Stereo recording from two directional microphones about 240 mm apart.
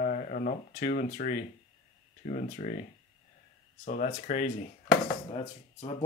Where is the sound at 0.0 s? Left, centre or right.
Left.